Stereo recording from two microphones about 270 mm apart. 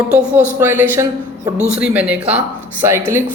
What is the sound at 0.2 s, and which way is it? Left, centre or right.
Speech, centre.